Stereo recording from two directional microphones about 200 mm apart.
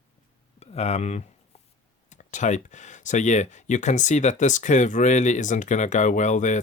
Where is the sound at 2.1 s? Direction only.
40° left (ahead or behind).